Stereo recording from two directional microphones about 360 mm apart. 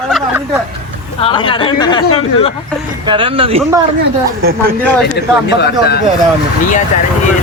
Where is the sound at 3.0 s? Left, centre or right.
Centre.